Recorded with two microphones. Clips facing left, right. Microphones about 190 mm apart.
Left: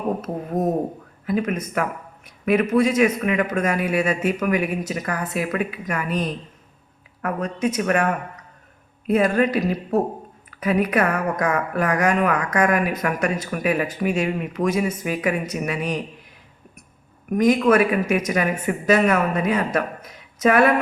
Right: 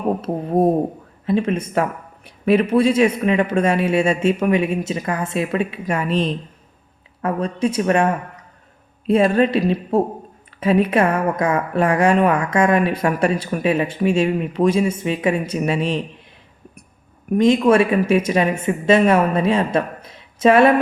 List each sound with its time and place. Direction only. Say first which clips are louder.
0.2 s speech: right 6 dB; 30° right (ahead or behind)
17.3 s speech: right 3 dB; 25° right (ahead or behind)